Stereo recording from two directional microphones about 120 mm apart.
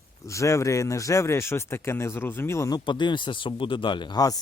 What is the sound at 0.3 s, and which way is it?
Speech, 25° left (ahead or behind).